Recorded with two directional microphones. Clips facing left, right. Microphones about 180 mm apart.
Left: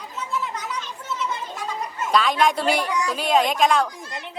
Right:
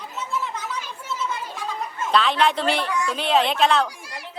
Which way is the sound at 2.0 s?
10° left (ahead or behind).